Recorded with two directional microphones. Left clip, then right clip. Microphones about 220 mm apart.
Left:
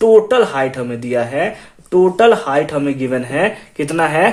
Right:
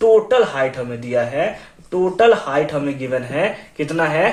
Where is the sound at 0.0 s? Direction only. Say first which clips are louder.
Left 3 dB; 50° left (ahead or behind).